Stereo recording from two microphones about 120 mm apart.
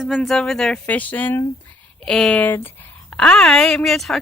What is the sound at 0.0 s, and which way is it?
Speech, centre (ahead or behind).